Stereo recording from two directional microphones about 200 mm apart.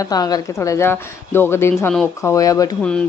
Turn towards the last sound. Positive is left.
turn(degrees=5)  # may be behind; listen again after turning